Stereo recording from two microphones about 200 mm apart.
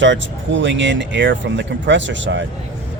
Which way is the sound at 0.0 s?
70° right (ahead or behind).